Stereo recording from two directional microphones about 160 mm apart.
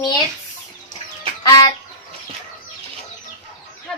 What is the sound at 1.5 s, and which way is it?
Music, 25° left (ahead or behind).